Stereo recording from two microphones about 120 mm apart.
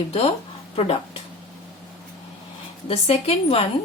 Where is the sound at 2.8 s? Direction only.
60° left (ahead or behind).